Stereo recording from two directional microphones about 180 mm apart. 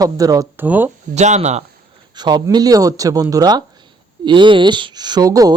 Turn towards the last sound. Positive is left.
turn(degrees=-20)  # may be behind; listen again after turning